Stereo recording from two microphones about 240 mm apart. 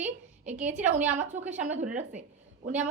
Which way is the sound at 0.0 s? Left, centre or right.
Centre.